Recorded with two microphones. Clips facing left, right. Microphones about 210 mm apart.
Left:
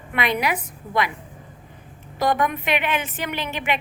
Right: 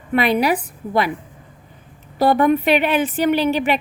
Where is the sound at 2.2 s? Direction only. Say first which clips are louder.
Right 7 dB; 35° right (ahead or behind).